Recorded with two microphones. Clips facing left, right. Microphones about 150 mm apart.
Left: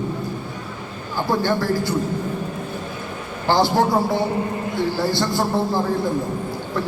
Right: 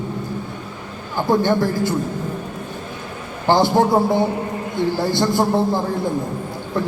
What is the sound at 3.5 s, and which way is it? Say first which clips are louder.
Speech: right 3 dB; 20° right (ahead or behind).